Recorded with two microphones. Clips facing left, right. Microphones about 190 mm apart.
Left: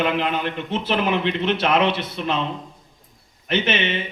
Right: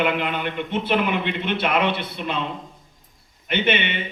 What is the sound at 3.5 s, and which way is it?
Speech, 60° right (ahead or behind).